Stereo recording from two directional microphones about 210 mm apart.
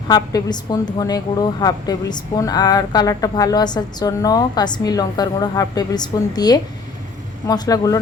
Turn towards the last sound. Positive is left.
turn(degrees=15)  # may be behind; listen again after turning